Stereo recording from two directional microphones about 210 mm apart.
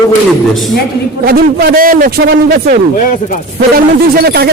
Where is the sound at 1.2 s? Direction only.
50° right (ahead or behind).